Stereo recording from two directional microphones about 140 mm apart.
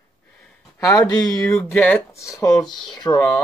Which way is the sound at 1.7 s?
10° left (ahead or behind).